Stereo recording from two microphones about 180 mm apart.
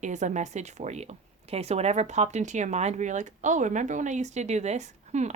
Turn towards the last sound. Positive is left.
turn(degrees=-40)  # may be behind; listen again after turning